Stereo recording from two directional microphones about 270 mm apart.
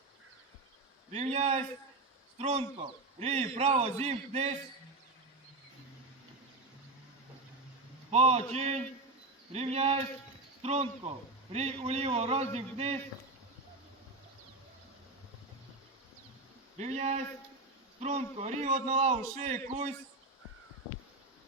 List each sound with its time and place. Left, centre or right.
1.1 s a man's voice: right
8.1 s a man's voice: right
16.7 s a man's voice: right